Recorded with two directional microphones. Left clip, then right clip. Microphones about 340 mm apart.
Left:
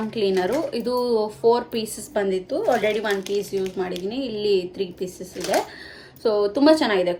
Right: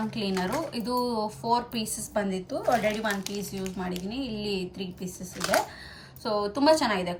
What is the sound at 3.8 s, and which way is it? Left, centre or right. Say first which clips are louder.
Speech: left 7 dB; centre.